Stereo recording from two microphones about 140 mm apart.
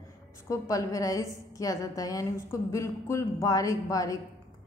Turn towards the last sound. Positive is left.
turn(degrees=25)  # may be behind; listen again after turning